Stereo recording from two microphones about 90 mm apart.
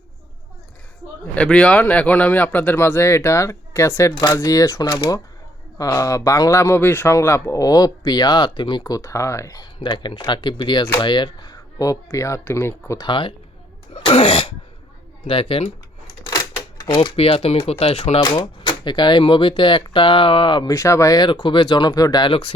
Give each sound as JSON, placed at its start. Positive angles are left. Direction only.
{"t": 1.4, "sound": "speech", "side_deg": 10}
{"t": 9.8, "sound": "speech", "side_deg": 60}
{"t": 13.1, "sound": "speech", "side_deg": 70}
{"t": 14.0, "sound": "cough", "side_deg": 80}
{"t": 16.2, "sound": "cash register", "side_deg": 40}
{"t": 17.7, "sound": "cough", "side_deg": 90}
{"t": 18.3, "sound": "speech", "side_deg": 60}
{"t": 20.7, "sound": "speech", "side_deg": 35}
{"t": 21.2, "sound": "speech", "side_deg": 60}
{"t": 22.2, "sound": "speech", "side_deg": 75}